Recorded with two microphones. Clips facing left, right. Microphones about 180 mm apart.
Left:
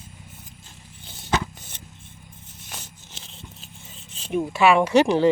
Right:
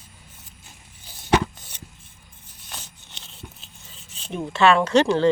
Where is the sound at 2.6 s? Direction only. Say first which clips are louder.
Right 1 dB; 5° left (ahead or behind).